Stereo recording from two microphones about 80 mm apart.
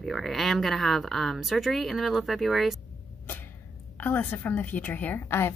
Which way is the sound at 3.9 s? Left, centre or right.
Left.